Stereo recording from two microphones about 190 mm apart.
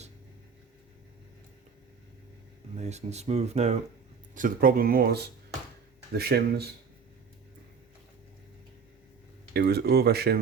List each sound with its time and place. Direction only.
2.7 s speech: 35° right (ahead or behind)
4.4 s speech: 45° right (ahead or behind)
9.5 s speech: 60° right (ahead or behind)